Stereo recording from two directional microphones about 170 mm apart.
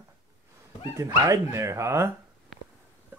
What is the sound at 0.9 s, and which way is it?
Speech, 20° right (ahead or behind).